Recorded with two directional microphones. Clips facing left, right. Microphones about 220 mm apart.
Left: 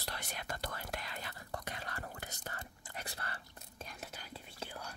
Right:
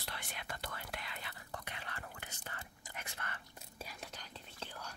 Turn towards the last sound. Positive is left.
turn(degrees=10)  # may be behind; listen again after turning